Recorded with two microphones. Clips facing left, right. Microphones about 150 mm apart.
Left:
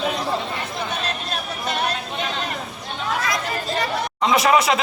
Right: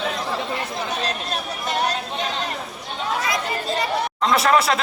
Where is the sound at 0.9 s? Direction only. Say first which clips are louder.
Right 1 dB; 40° right (ahead or behind).